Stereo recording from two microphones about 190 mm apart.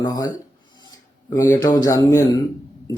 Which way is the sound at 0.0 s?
20° left (ahead or behind).